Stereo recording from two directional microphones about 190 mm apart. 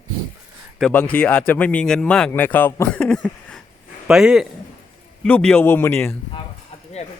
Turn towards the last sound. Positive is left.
turn(degrees=10)  # may be behind; listen again after turning